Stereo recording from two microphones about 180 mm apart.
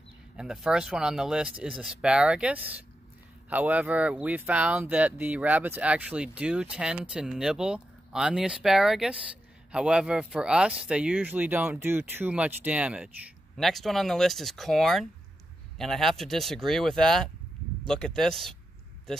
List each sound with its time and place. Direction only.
0.4 s speech: 5° right (ahead or behind)